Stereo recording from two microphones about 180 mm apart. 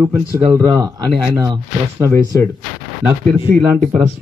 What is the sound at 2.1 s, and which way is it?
Speech, 15° left (ahead or behind).